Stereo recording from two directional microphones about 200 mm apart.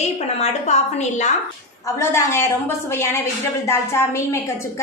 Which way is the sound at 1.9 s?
15° left (ahead or behind).